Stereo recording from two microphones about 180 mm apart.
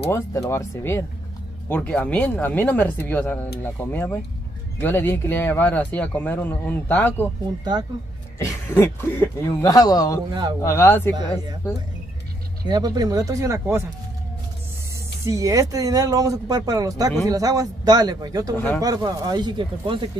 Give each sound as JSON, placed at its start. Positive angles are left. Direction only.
{"t": 0.1, "sound": "speech", "side_deg": 15}
{"t": 8.4, "sound": "speech", "side_deg": 15}
{"t": 12.6, "sound": "speech", "side_deg": -20}
{"t": 15.2, "sound": "speech", "side_deg": -20}